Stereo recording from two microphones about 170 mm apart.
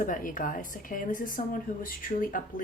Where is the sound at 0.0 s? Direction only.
50° left (ahead or behind).